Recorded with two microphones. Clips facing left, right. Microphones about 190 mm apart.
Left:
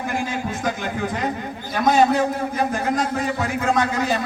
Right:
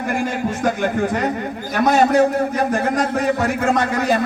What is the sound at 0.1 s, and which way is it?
A man's voice, 60° right (ahead or behind).